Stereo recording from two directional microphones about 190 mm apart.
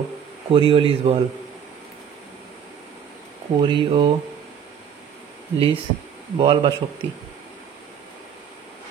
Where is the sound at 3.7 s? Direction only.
25° right (ahead or behind).